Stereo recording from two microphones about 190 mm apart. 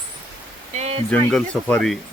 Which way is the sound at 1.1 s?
5° left (ahead or behind).